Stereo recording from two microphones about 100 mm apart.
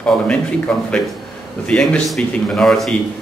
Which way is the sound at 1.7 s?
5° left (ahead or behind).